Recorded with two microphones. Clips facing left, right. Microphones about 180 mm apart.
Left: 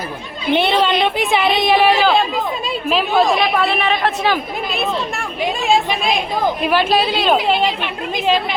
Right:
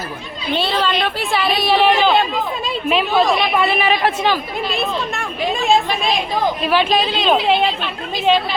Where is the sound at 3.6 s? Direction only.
5° right (ahead or behind).